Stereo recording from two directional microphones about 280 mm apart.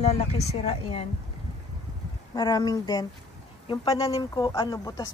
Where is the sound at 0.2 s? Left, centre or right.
Left.